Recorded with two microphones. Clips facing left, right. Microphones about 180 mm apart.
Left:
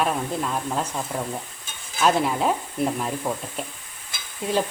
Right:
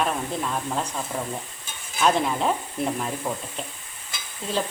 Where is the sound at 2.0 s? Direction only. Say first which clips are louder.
Left 1 dB; 5° left (ahead or behind).